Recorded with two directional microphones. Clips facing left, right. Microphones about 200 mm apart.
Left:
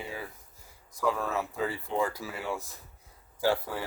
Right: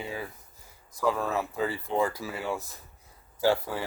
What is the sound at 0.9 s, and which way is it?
Speech, 30° right (ahead or behind).